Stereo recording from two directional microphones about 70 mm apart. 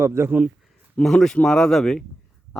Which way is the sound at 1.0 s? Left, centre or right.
Centre.